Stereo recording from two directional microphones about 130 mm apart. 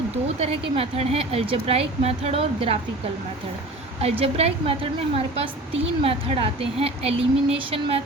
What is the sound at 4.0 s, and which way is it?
Speech, 50° right (ahead or behind).